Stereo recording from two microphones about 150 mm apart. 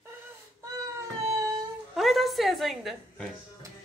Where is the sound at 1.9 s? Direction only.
Centre (ahead or behind).